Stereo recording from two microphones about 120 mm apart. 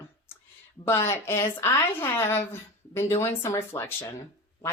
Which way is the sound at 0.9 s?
20° left (ahead or behind).